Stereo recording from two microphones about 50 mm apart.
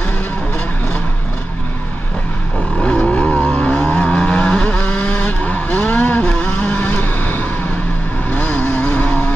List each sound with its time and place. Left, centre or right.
2.8 s vehicle: left
6.9 s vehicle: left